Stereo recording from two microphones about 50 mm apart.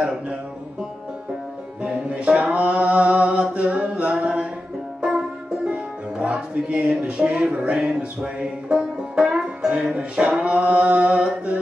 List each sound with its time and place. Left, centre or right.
0.0 s music: centre
1.8 s music: right